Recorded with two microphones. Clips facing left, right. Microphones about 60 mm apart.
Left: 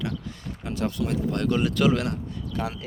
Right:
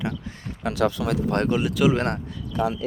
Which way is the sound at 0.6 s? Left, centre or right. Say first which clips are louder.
Right 5 dB; right.